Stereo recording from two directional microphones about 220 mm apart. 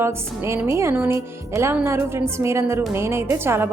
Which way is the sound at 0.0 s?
10° right (ahead or behind).